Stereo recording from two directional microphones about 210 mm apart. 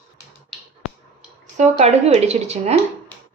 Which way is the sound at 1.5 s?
35° right (ahead or behind).